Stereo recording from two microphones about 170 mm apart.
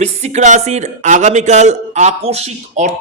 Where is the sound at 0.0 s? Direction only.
40° right (ahead or behind).